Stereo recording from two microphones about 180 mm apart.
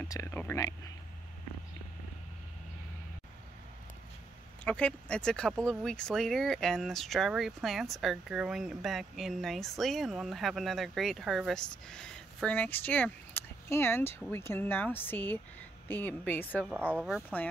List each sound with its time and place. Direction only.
0.1 s a woman's voice: 15° left (ahead or behind)
4.6 s a woman's voice: 5° left (ahead or behind)
16.9 s speech: 5° right (ahead or behind)